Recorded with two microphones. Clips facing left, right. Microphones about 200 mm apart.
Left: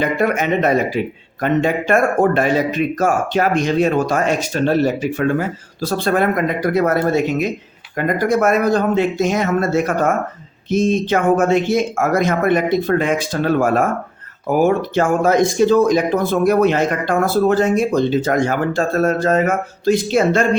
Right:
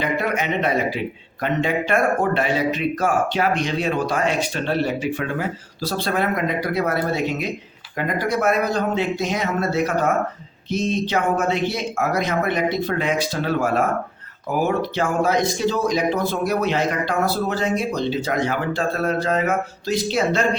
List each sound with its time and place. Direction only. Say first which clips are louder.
0.0 s speech: left 5 dB; 45° left (ahead or behind)